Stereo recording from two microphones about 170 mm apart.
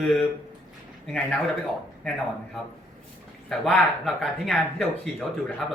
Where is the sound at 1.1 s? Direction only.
5° left (ahead or behind).